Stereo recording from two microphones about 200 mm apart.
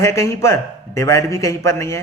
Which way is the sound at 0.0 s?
15° left (ahead or behind).